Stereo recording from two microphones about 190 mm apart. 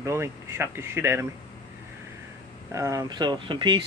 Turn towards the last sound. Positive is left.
turn(degrees=-25)  # may be behind; listen again after turning